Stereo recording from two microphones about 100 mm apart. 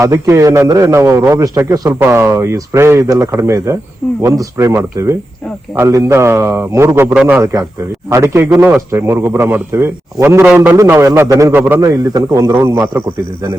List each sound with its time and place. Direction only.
0.0 s a man's voice: 30° right (ahead or behind)
8.1 s a man's voice: 30° right (ahead or behind)
10.8 s a man's voice: 30° right (ahead or behind)